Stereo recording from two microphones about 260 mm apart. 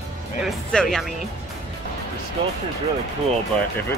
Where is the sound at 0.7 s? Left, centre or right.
Centre.